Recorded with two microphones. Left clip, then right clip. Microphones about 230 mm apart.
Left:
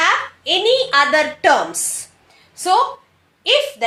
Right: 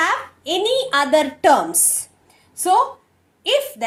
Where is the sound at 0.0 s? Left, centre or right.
Right.